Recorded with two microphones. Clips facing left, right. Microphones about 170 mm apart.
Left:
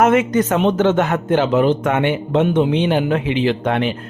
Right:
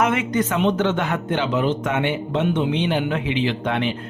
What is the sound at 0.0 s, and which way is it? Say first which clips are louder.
Speech: left 6 dB; 45° left (ahead or behind).